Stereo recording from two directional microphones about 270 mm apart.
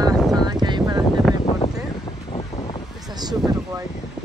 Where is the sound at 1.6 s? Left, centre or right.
Left.